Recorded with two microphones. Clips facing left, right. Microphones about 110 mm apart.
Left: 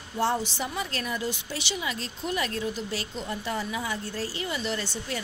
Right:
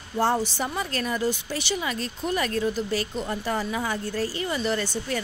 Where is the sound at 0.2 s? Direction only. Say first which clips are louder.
Right 3 dB; 45° right (ahead or behind).